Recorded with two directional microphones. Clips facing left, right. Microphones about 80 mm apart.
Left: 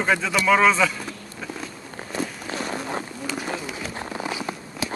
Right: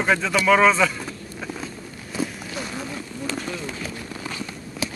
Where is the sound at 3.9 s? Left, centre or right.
Left.